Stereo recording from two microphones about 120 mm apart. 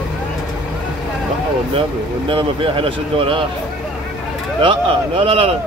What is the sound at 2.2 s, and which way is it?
Speech, 45° right (ahead or behind).